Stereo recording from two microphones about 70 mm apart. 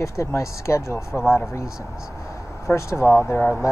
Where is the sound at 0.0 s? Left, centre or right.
Left.